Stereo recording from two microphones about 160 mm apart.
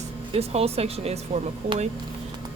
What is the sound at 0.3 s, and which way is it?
Speech, 40° right (ahead or behind).